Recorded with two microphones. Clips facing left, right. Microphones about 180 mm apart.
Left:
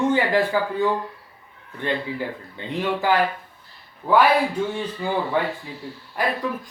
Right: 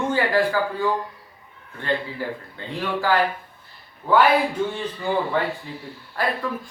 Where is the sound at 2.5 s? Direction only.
20° left (ahead or behind).